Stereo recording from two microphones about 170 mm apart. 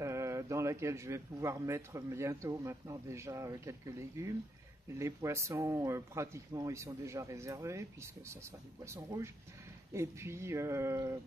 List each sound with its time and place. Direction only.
0.0 s speech: 15° right (ahead or behind)